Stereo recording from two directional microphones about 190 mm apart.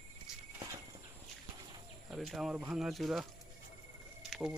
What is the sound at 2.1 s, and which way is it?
Speech, centre (ahead or behind).